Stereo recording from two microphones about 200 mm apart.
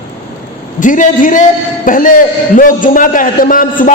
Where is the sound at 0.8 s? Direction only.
40° left (ahead or behind).